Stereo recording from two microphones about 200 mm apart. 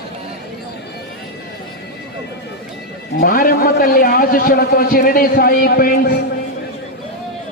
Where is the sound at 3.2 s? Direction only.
45° left (ahead or behind).